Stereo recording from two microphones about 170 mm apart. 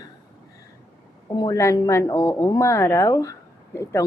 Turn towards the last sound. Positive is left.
turn(degrees=15)  # may be behind; listen again after turning